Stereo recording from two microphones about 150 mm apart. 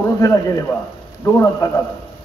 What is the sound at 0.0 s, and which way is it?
A man's voice, 20° left (ahead or behind).